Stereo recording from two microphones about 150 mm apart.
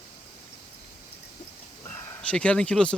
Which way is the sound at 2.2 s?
5° left (ahead or behind).